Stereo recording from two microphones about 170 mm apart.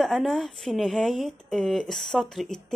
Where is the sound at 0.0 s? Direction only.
Centre (ahead or behind).